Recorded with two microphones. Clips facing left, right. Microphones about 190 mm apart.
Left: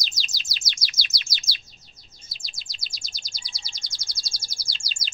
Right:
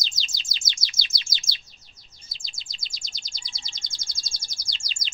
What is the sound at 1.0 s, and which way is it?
Chirp, 25° right (ahead or behind).